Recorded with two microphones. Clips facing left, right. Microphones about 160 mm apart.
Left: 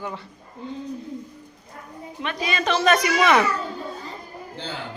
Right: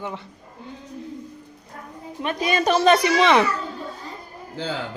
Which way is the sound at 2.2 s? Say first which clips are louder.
Right 4 dB; 45° right (ahead or behind).